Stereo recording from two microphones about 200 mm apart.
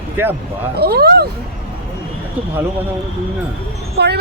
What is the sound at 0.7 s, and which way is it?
Speech, 50° right (ahead or behind).